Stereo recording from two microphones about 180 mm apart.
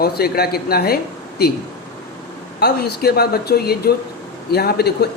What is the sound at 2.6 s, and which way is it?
Speech, 60° left (ahead or behind).